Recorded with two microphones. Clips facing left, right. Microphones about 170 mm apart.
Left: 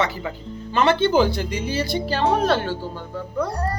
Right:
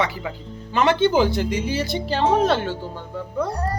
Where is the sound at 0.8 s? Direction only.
15° right (ahead or behind).